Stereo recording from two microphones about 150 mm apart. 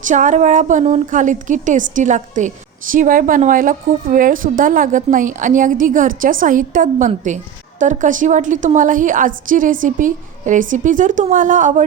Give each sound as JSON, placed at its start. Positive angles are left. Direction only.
{"t": 0.1, "sound": "a woman's voice", "side_deg": -55}